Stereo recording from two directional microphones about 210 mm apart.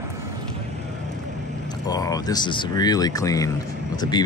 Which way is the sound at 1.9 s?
15° left (ahead or behind).